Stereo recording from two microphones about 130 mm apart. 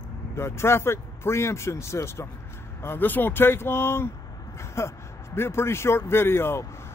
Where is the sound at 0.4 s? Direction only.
20° left (ahead or behind).